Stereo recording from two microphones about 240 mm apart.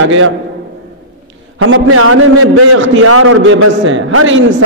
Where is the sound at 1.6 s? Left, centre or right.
Right.